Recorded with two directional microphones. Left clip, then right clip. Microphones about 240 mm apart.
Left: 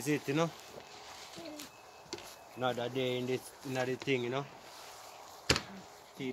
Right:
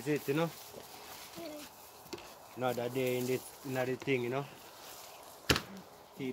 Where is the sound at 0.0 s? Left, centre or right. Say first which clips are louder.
Even; left.